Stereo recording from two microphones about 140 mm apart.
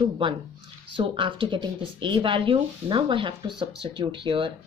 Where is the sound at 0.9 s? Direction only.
40° right (ahead or behind).